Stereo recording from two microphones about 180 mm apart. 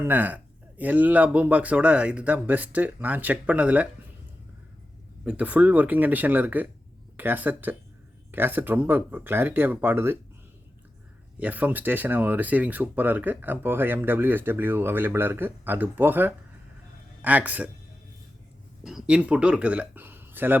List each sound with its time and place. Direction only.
0.0 s speech: 10° right (ahead or behind)
5.2 s speech: 5° right (ahead or behind)
11.3 s speech: 10° right (ahead or behind)
18.8 s speech: centre (ahead or behind)